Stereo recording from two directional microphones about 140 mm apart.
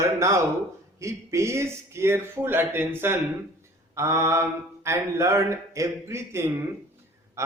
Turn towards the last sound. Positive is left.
turn(degrees=-20)  # may be behind; listen again after turning